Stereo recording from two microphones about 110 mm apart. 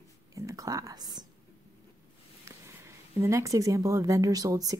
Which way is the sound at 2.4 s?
25° right (ahead or behind).